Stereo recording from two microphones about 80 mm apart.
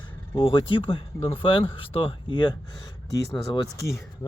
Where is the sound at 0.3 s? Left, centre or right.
Left.